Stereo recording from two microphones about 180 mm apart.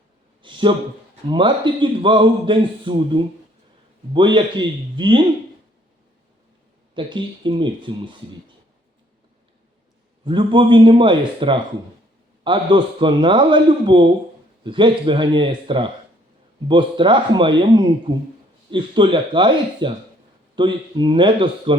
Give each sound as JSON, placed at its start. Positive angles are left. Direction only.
{"t": 0.4, "sound": "a sound", "side_deg": -25}
{"t": 1.3, "sound": "a man's voice", "side_deg": -25}
{"t": 6.9, "sound": "a man's voice", "side_deg": -25}
{"t": 10.2, "sound": "a man's voice", "side_deg": -25}